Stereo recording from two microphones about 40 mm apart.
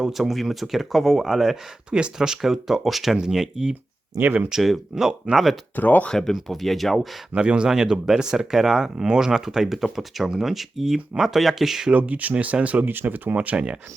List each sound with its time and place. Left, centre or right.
0.1 s speech: centre
1.9 s speech: right; by 5.5 s centre
5.7 s speech: left
6.1 s speech: centre
6.5 s speech: centre
7.3 s speech: right
7.7 s speech: centre
11.9 s speech: right
12.9 s speech: right